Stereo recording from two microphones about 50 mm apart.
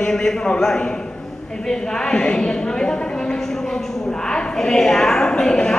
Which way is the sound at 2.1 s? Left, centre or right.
Centre.